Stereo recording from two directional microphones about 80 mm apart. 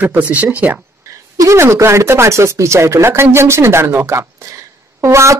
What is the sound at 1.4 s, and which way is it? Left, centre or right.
Speech, right.